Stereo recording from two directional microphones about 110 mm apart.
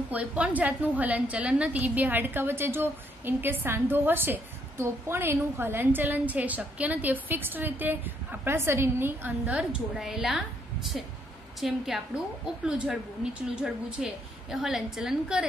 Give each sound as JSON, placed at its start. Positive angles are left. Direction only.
{"t": 0.1, "sound": "a woman's voice", "side_deg": -15}
{"t": 9.6, "sound": "a woman's voice", "side_deg": -5}